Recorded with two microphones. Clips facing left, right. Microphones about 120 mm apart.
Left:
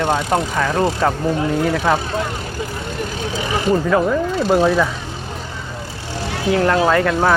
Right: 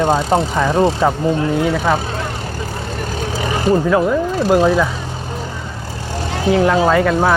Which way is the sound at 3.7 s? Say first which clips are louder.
Right 2 dB; 10° right (ahead or behind).